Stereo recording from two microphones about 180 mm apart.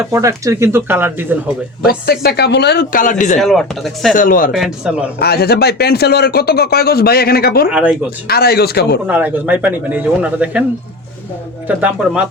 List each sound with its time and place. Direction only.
0.0 s speech: 15° right (ahead or behind)
1.8 s speech: 60° left (ahead or behind)
3.4 s speech: centre (ahead or behind)
4.1 s speech: 50° left (ahead or behind)
4.5 s speech: 5° right (ahead or behind)
5.2 s speech: 60° left (ahead or behind)
7.7 s speech: 5° right (ahead or behind)
8.3 s speech: 60° left (ahead or behind)
9.0 s speech: 10° right (ahead or behind)
11.7 s speech: 5° right (ahead or behind)